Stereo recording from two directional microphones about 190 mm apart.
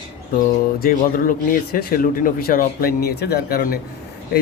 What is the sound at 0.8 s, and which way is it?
Speech, 50° left (ahead or behind).